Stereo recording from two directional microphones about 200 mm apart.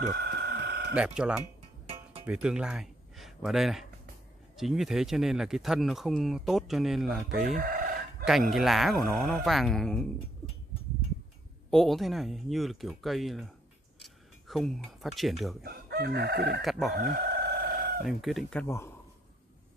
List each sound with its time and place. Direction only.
0.0 s a sound: 50° right (ahead or behind)
0.9 s speech: 5° right (ahead or behind)
7.5 s chicken: 45° right (ahead or behind)
8.3 s speech: centre (ahead or behind)
11.7 s speech: centre (ahead or behind)
15.6 s chicken: 50° right (ahead or behind)
18.0 s speech: centre (ahead or behind)
18.7 s a man's voice: 15° left (ahead or behind)